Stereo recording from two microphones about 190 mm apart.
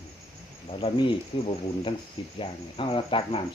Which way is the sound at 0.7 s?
30° left (ahead or behind).